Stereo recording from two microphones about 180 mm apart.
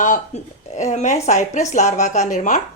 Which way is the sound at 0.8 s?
40° left (ahead or behind).